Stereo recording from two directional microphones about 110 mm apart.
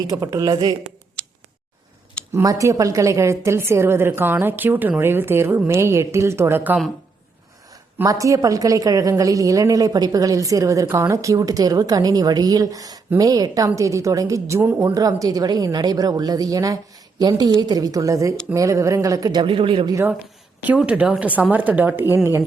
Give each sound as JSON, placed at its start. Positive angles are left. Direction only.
{"t": 0.1, "sound": "a woman's voice", "side_deg": -30}
{"t": 1.2, "sound": "tick", "side_deg": 10}
{"t": 2.3, "sound": "a woman's voice", "side_deg": -30}
{"t": 8.0, "sound": "a woman's voice", "side_deg": -30}
{"t": 20.6, "sound": "a woman's voice", "side_deg": -10}